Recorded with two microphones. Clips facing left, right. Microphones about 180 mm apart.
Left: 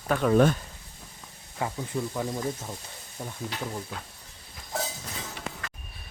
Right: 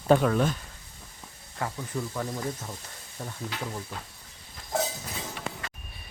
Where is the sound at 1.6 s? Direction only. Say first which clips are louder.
Left 2 dB; 15° left (ahead or behind).